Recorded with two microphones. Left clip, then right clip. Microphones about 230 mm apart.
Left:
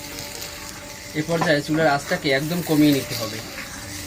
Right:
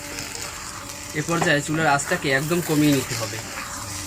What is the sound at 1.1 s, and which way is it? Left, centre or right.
Speech, right.